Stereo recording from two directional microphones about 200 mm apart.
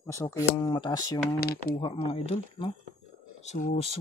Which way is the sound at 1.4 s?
50° left (ahead or behind).